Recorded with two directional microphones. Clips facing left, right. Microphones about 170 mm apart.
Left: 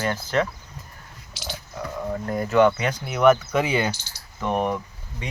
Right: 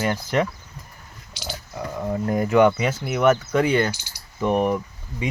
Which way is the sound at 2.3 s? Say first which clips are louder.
Right 1 dB; 15° right (ahead or behind).